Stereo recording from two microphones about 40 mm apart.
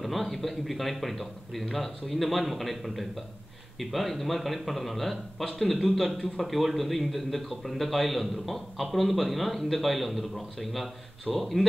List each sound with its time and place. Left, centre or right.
0.0 s a man's voice: centre